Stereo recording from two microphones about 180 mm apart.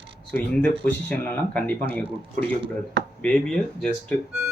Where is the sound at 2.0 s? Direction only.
35° right (ahead or behind).